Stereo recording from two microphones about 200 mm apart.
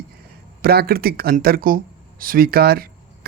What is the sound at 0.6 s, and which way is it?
Speech, 50° right (ahead or behind).